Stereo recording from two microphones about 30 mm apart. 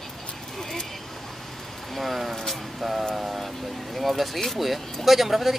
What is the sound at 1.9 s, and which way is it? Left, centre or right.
Speech, centre.